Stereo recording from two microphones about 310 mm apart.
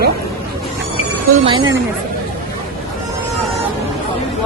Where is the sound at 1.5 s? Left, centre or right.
Centre.